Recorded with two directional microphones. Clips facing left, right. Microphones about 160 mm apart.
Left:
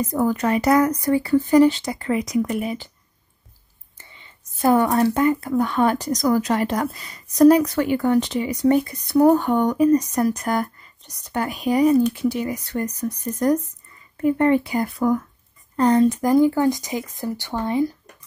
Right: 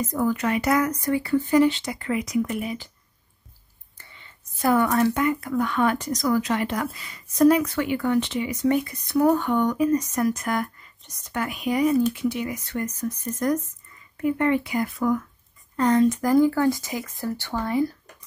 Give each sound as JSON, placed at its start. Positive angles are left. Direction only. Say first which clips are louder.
{"t": 0.0, "sound": "a woman's voice", "louder": "left 3 dB", "side_deg": 35}
{"t": 4.0, "sound": "a woman's voice", "louder": "left 1 dB", "side_deg": 20}
{"t": 16.2, "sound": "speech", "louder": "left 2 dB", "side_deg": 20}